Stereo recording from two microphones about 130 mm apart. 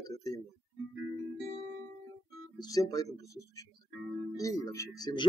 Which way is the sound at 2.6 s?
25° left (ahead or behind).